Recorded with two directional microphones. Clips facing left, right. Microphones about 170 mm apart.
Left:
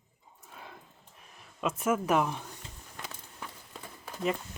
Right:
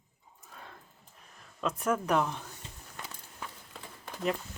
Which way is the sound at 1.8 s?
5° left (ahead or behind).